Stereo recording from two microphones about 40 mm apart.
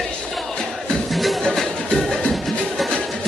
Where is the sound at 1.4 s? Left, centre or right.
Centre.